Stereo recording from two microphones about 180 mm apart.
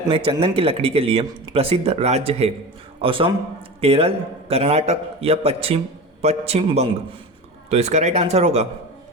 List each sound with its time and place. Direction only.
0.1 s a man's voice: 30° right (ahead or behind)
1.5 s a man's voice: 35° right (ahead or behind)